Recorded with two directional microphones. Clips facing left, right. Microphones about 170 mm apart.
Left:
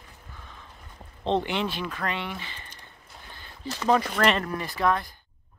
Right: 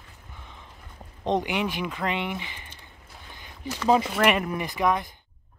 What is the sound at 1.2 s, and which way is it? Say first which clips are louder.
Speech: even; 15° right (ahead or behind).